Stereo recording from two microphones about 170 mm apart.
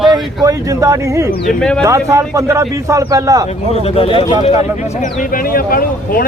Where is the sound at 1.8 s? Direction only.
15° right (ahead or behind).